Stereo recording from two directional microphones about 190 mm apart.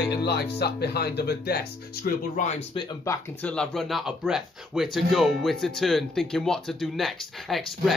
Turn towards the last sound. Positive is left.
turn(degrees=0)  # may be behind; listen again after turning